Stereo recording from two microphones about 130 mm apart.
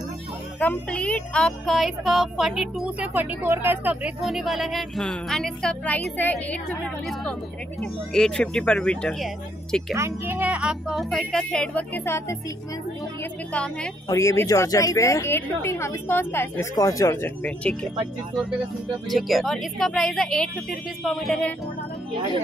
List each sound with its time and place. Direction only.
0.6 s speech: 10° left (ahead or behind)
3.2 s speech: 20° right (ahead or behind); by 6.6 s 10° left (ahead or behind)
7.8 s speech: 5° left (ahead or behind)
9.9 s speech: 20° right (ahead or behind); by 11.8 s 5° left (ahead or behind)
12.0 s a woman's voice: 20° left (ahead or behind)
13.5 s speech: 10° left (ahead or behind)
14.0 s a woman's voice: 20° left (ahead or behind)
19.0 s speech: centre (ahead or behind)